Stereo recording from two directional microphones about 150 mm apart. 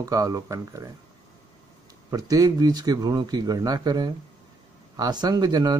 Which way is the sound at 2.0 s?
25° right (ahead or behind).